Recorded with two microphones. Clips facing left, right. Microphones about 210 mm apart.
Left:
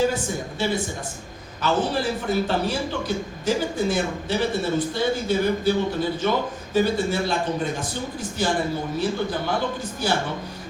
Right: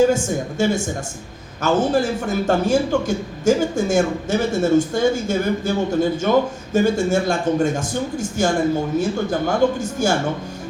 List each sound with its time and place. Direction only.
0.6 s a man's voice: 45° right (ahead or behind)